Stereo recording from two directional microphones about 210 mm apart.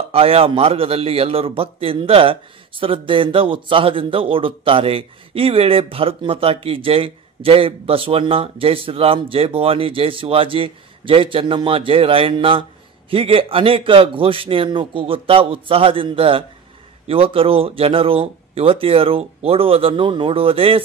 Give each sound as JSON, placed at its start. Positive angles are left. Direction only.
{"t": 0.1, "sound": "a man's voice", "side_deg": -25}